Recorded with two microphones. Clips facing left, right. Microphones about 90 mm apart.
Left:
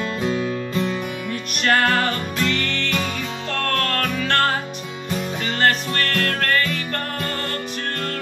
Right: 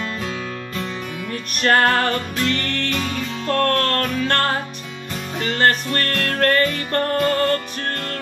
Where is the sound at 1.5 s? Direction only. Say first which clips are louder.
Right 2 dB; 40° right (ahead or behind).